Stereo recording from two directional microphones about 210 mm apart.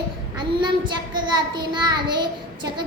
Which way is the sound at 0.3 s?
20° right (ahead or behind).